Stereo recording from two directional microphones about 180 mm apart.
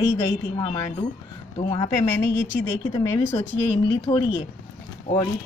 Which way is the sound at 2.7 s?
20° left (ahead or behind).